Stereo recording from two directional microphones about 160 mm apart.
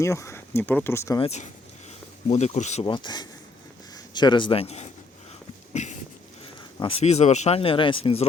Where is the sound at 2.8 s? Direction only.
30° left (ahead or behind).